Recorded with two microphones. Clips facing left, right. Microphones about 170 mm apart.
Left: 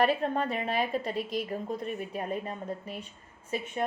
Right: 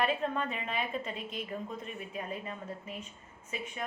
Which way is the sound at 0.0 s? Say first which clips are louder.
Left 5 dB; 40° left (ahead or behind).